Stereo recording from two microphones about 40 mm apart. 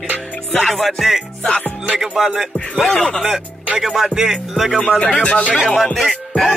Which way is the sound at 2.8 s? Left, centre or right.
Centre.